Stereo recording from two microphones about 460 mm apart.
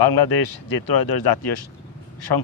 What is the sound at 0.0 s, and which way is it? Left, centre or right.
A man's voice, left.